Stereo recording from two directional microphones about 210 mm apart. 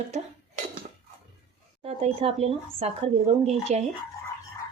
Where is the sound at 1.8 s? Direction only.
30° right (ahead or behind).